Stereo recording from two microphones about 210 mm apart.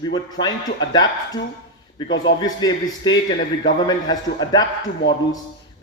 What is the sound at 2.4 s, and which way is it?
Speech, 20° left (ahead or behind).